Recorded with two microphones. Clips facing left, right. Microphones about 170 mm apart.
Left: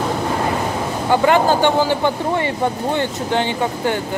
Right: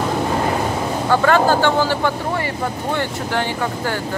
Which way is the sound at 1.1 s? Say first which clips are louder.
Left 1 dB; 15° left (ahead or behind).